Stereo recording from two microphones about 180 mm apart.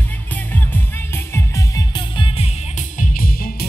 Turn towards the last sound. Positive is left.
turn(degrees=50)  # may be behind; listen again after turning